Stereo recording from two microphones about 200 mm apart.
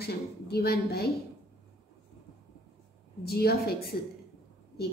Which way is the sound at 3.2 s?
50° left (ahead or behind).